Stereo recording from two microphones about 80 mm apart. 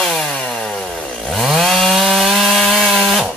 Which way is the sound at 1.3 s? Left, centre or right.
Centre.